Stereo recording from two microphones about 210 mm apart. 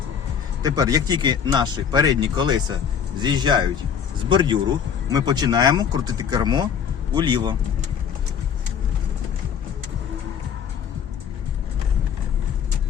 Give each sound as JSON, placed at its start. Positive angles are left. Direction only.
{"t": 0.6, "sound": "speech", "side_deg": -15}